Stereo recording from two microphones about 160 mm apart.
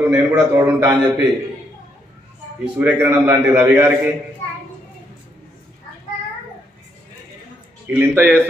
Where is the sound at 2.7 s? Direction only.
15° right (ahead or behind).